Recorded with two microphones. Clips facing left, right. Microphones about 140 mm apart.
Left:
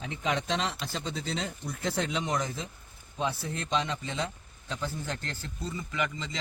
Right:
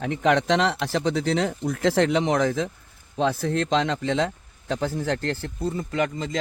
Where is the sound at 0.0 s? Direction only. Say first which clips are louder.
Right 10 dB; 65° right (ahead or behind).